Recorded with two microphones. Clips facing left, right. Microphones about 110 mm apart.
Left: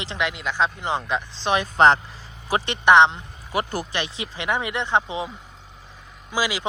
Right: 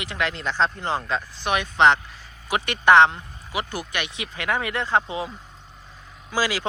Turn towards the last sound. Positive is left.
turn(degrees=15)  # may be behind; listen again after turning